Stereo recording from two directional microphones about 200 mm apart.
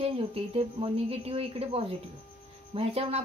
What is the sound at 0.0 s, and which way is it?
A woman's voice, 30° right (ahead or behind).